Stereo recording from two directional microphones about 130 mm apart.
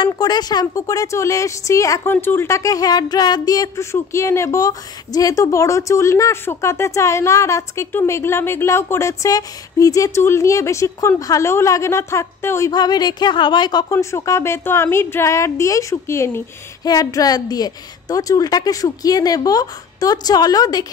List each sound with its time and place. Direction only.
0.0 s a woman's voice: 30° left (ahead or behind)
13.9 s a woman's voice: 20° left (ahead or behind)